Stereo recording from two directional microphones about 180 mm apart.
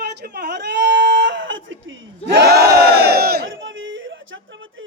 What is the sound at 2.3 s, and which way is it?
Battle cry, 65° right (ahead or behind).